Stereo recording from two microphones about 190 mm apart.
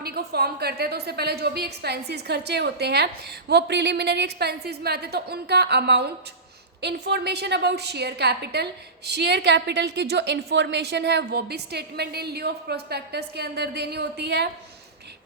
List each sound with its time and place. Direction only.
0.0 s a woman's voice: 55° right (ahead or behind)